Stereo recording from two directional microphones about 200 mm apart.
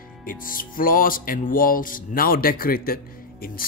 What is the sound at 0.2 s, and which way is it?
Music, 45° left (ahead or behind).